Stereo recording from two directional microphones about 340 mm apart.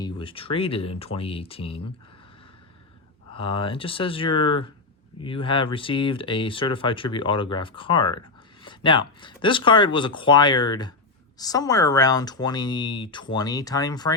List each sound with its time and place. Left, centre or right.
0.0 s speech: centre
3.3 s speech: centre